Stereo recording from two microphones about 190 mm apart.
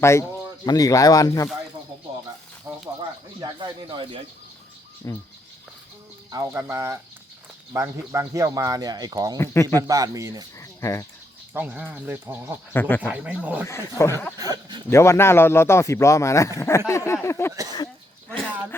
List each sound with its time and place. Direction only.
0.0 s speech: 15° left (ahead or behind)
2.7 s a sound: 15° right (ahead or behind)
3.4 s speech: 25° right (ahead or behind)
5.0 s speech: 15° left (ahead or behind)
6.3 s speech: 15° right (ahead or behind)
10.6 s a sound: 15° left (ahead or behind)
11.5 s speech: 5° right (ahead or behind)
12.7 s speech: 10° left (ahead or behind)
13.1 s speech: 5° right (ahead or behind)
13.7 s speech: 15° left (ahead or behind)
14.3 s speech: 20° right (ahead or behind)
14.8 s speech: 15° left (ahead or behind)